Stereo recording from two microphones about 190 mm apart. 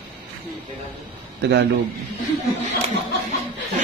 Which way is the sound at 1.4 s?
65° right (ahead or behind).